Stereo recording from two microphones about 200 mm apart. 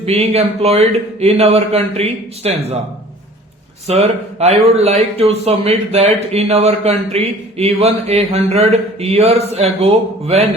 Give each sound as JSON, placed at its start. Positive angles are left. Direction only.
{"t": 0.0, "sound": "a man's voice", "side_deg": -30}
{"t": 3.8, "sound": "a man's voice", "side_deg": -30}